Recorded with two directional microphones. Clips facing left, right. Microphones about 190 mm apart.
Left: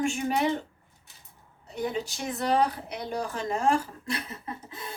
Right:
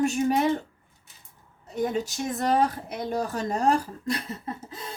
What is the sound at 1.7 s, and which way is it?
Speech, 45° right (ahead or behind).